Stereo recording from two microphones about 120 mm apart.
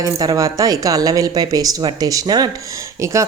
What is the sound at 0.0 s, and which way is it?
A woman's voice, 30° right (ahead or behind).